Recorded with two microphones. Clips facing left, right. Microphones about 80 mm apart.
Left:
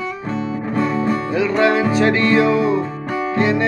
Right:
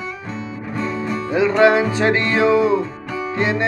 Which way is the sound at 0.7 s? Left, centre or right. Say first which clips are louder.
Left 4 dB; left.